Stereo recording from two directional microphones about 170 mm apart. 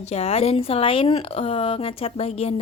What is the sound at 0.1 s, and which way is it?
Speech, 35° left (ahead or behind).